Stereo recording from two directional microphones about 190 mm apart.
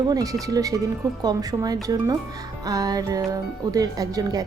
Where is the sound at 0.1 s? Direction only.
20° right (ahead or behind).